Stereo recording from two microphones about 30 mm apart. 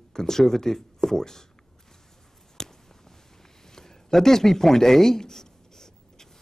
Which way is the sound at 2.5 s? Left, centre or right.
Centre.